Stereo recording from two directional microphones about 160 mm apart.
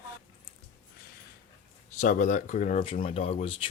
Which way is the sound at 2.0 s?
50° left (ahead or behind).